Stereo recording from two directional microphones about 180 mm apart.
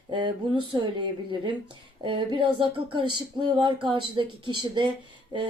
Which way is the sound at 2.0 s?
25° right (ahead or behind).